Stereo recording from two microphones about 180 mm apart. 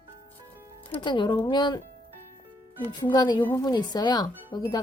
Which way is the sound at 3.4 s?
10° left (ahead or behind).